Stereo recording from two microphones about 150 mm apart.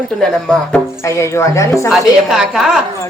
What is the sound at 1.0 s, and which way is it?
Speech, 20° left (ahead or behind).